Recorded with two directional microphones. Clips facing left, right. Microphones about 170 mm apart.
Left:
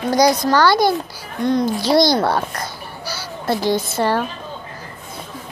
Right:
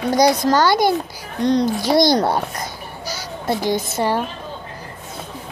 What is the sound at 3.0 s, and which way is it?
Babbling, 20° right (ahead or behind).